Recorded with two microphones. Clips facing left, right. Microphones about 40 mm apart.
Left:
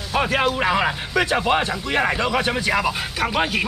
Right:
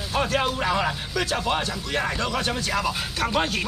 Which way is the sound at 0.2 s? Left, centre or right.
Left.